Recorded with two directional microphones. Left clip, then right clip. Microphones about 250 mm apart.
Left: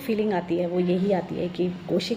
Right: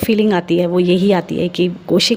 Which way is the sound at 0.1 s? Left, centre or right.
Right.